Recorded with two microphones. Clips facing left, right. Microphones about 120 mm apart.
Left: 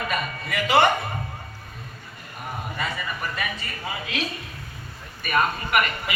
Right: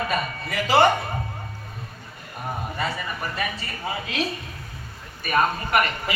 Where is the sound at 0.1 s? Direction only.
35° right (ahead or behind).